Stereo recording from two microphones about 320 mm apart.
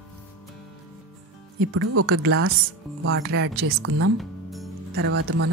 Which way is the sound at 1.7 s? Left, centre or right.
Right.